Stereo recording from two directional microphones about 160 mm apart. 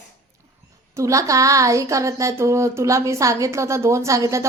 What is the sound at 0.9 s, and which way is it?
Speech, 20° right (ahead or behind).